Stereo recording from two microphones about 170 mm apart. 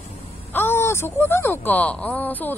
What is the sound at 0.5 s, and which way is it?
Speech, 15° left (ahead or behind).